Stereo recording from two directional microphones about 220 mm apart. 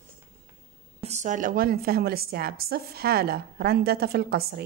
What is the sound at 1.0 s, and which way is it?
A woman's voice, 30° right (ahead or behind).